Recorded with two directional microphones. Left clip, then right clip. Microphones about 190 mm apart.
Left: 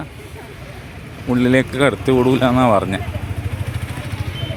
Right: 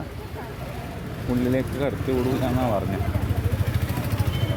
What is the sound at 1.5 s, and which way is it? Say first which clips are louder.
Speech: left 12 dB; 30° left (ahead or behind).